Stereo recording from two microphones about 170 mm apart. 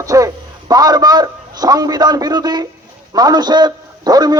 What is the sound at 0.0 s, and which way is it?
A man's voice, 20° right (ahead or behind).